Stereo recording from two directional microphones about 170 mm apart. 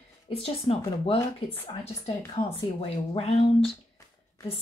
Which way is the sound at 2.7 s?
35° left (ahead or behind).